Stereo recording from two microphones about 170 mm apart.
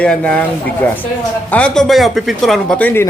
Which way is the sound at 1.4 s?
5° left (ahead or behind).